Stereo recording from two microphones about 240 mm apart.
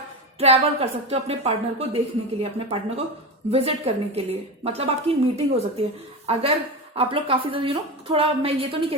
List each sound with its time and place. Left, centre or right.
0.3 s a woman's voice: right